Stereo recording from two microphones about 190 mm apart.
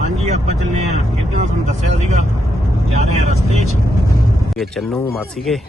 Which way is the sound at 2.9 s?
35° right (ahead or behind).